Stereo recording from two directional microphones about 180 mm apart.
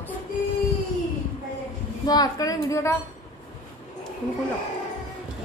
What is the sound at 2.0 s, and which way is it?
Speech, 20° left (ahead or behind).